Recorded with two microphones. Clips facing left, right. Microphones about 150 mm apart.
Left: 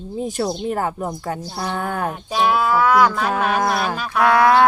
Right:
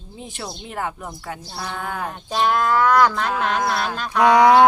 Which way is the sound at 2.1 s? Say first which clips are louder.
Even; 5° left (ahead or behind).